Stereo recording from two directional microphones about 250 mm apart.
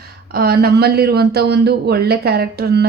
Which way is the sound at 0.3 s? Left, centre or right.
Right.